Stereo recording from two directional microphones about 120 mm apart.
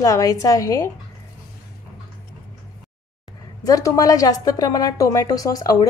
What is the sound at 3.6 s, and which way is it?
A woman's voice, 30° left (ahead or behind).